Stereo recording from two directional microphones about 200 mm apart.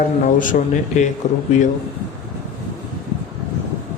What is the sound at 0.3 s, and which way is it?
Speech, 40° left (ahead or behind).